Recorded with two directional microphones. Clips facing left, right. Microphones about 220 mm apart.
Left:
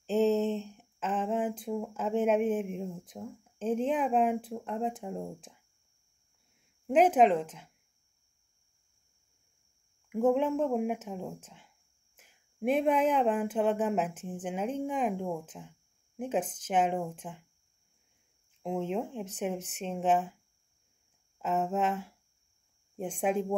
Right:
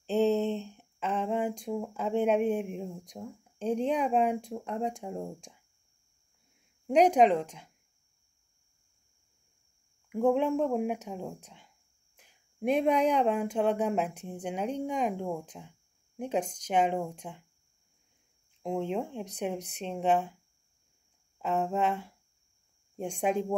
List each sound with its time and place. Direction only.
0.0 s a sound: centre (ahead or behind)
6.9 s speech: 5° left (ahead or behind)
10.0 s speech: centre (ahead or behind)
18.6 s speech: centre (ahead or behind)
21.4 s speech: 5° left (ahead or behind)